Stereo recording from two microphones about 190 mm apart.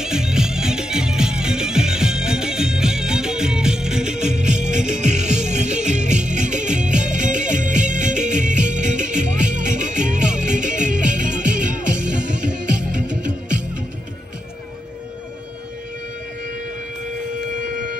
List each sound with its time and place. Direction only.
0.0 s music: 5° right (ahead or behind)
4.7 s music: 40° right (ahead or behind)
12.4 s music: 5° right (ahead or behind)
17.6 s civil defense siren: 40° right (ahead or behind)